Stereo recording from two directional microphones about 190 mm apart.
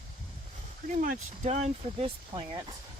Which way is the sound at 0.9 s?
40° right (ahead or behind).